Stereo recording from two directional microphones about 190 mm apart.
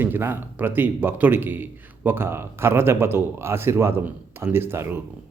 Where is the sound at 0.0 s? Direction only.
10° right (ahead or behind).